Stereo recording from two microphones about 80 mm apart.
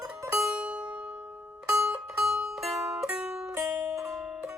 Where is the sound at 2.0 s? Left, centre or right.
Centre.